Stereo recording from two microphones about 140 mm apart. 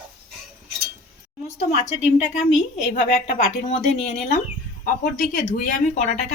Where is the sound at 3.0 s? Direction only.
90° left.